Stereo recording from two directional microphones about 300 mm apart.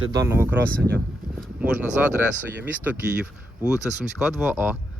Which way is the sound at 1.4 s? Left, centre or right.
Centre.